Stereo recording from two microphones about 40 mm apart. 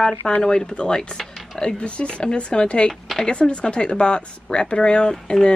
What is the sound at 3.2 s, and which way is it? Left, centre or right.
Speech, left.